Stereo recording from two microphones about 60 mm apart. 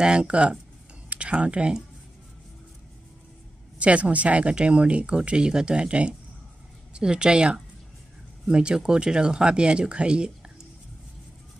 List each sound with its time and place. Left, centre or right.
0.0 s speech: centre
3.7 s speech: right